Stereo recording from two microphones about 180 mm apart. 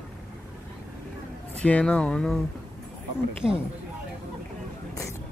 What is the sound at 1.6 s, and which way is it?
Speech, 5° left (ahead or behind).